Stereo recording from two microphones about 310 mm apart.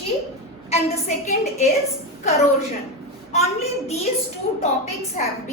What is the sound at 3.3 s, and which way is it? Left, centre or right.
Speech, left.